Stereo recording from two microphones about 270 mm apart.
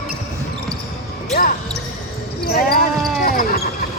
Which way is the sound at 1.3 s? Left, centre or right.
Left.